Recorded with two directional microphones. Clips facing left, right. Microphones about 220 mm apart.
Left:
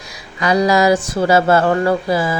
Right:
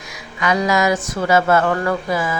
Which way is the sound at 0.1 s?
35° left (ahead or behind).